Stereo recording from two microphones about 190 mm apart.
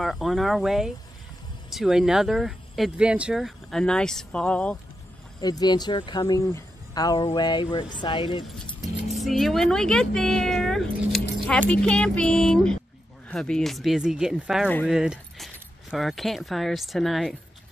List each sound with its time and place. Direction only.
0.0 s speech: centre (ahead or behind)
5.4 s speech: 20° left (ahead or behind)
8.6 s speech: centre (ahead or behind)